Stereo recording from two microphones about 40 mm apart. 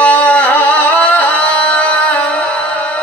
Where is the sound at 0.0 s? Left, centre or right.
Left.